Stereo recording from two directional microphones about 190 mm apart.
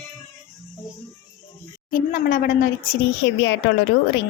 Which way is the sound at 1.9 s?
45° left (ahead or behind).